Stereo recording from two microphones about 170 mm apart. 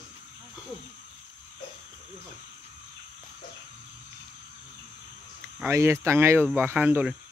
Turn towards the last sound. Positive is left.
turn(degrees=-10)  # may be behind; listen again after turning